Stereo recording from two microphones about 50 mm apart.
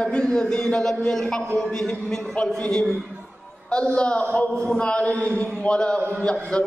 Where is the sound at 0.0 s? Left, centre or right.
Centre.